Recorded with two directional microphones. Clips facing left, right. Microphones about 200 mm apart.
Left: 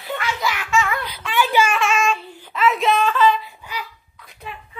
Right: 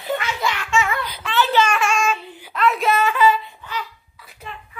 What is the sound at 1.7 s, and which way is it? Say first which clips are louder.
Child singing: left 1 dB; centre (ahead or behind).